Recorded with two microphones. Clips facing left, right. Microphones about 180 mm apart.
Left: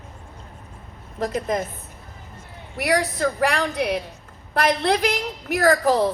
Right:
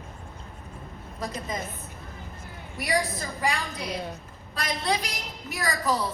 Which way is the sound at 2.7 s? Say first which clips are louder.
Left 6 dB; 70° left (ahead or behind).